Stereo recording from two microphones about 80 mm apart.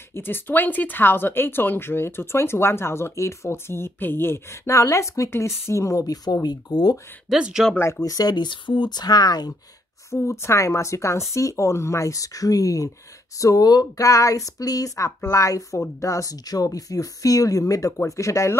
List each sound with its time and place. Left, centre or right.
0.1 s speech: left
4.6 s speech: left
6.4 s speech: left
7.2 s speech: centre
8.0 s speech: left
10.1 s speech: left